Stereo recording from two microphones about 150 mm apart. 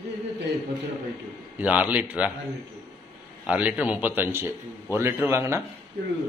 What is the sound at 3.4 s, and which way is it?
A man's voice, 10° right (ahead or behind).